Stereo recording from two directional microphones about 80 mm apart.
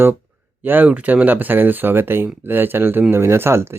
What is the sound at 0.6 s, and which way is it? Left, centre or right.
Speech, right.